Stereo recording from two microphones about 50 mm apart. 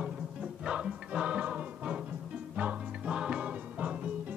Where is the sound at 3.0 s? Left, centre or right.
Centre.